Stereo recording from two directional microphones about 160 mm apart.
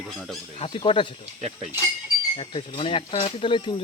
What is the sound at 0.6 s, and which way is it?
Speech, 30° left (ahead or behind).